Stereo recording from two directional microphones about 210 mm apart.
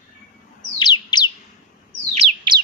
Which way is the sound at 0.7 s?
20° left (ahead or behind).